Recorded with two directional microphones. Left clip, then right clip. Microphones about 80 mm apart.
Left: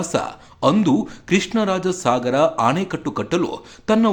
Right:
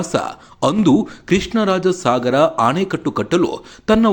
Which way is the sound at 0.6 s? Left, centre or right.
Right.